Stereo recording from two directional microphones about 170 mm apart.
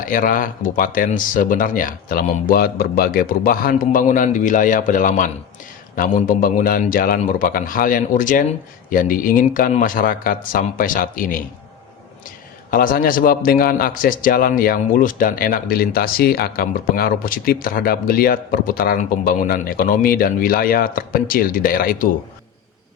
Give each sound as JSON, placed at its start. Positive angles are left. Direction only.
{"t": 0.0, "sound": "a man's voice", "side_deg": 55}
{"t": 12.7, "sound": "a man's voice", "side_deg": 55}